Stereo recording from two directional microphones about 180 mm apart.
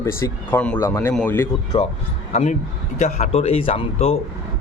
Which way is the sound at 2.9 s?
40° left (ahead or behind).